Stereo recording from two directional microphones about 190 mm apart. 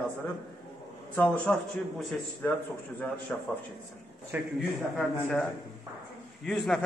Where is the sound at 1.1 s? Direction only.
10° left (ahead or behind).